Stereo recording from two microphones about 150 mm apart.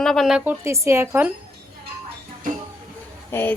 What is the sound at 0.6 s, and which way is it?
Speech, 20° right (ahead or behind).